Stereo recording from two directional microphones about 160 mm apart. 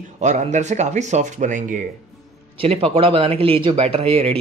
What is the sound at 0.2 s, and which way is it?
Speech, 50° right (ahead or behind).